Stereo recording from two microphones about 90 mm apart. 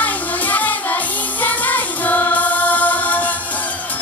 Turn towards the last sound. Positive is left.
turn(degrees=15)  # may be behind; listen again after turning